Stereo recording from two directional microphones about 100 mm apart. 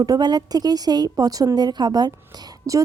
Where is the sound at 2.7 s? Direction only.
30° right (ahead or behind).